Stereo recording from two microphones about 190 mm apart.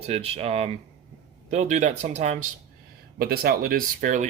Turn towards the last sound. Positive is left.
turn(degrees=-40)  # may be behind; listen again after turning